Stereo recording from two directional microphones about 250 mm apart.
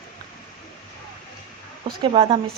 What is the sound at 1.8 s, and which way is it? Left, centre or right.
Speech, right.